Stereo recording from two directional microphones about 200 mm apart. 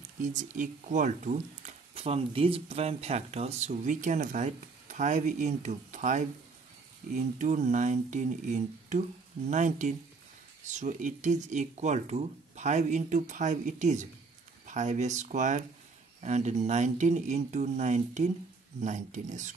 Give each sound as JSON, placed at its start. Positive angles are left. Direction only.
{"t": 0.2, "sound": "speech", "side_deg": -40}